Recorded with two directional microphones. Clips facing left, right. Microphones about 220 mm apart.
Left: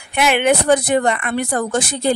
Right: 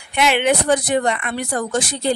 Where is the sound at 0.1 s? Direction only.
55° left (ahead or behind).